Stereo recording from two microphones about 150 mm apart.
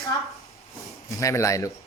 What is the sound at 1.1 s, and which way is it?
Speech, 20° left (ahead or behind).